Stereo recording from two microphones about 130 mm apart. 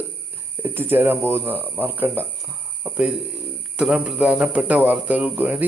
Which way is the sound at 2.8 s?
10° right (ahead or behind).